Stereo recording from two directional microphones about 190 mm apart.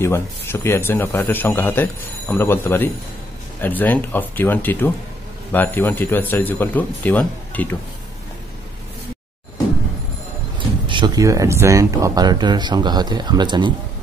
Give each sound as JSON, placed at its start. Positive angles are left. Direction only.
{"t": 0.0, "sound": "speech", "side_deg": 15}
{"t": 10.9, "sound": "speech", "side_deg": -25}